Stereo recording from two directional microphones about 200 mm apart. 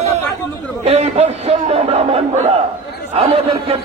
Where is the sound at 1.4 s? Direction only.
30° right (ahead or behind).